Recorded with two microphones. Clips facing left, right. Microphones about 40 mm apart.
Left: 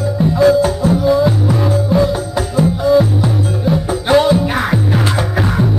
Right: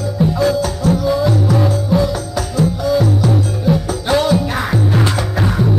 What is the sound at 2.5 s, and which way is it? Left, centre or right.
Music, left.